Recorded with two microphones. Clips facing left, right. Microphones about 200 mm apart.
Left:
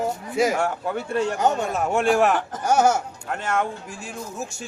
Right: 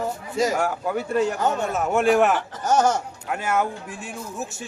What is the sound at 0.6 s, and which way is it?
A man's voice, 5° right (ahead or behind).